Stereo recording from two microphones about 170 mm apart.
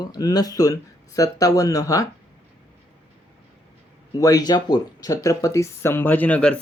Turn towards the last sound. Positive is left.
turn(degrees=5)  # may be behind; listen again after turning